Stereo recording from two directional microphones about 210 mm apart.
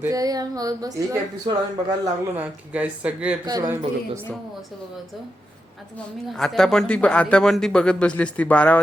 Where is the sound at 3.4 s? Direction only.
15° right (ahead or behind).